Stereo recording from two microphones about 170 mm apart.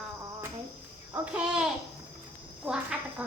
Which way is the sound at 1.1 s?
10° right (ahead or behind).